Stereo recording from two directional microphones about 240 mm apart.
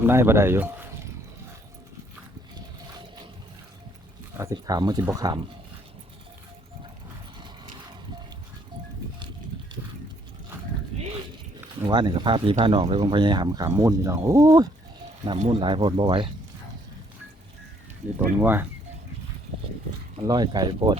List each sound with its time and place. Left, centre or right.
0.0 s speech: centre
4.4 s speech: centre
7.3 s mechanisms: centre
11.8 s speech: centre
18.3 s speech: centre
20.1 s speech: centre